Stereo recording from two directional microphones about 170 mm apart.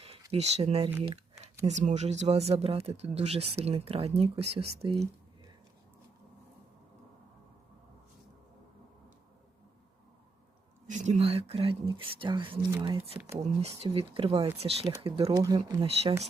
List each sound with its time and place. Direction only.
0.3 s speech: 35° right (ahead or behind)
10.8 s speech: 45° right (ahead or behind)
15.3 s speech: 20° right (ahead or behind)